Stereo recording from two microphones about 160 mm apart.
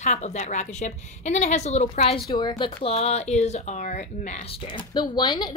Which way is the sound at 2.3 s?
30° left (ahead or behind).